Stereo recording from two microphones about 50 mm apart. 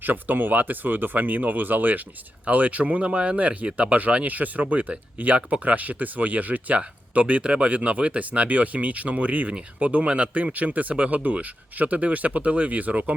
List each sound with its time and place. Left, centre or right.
0.0 s speech: right